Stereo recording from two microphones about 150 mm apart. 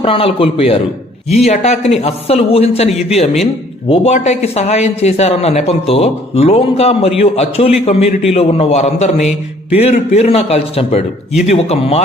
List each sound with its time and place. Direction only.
0.0 s a man's voice: 40° left (ahead or behind)